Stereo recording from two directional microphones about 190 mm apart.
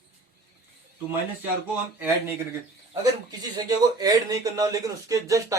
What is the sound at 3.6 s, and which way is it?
Speech, 20° right (ahead or behind).